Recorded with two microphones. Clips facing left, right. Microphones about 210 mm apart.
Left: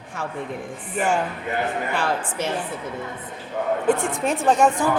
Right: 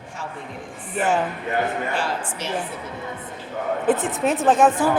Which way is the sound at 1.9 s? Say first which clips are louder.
Left 2 dB; 55° left (ahead or behind).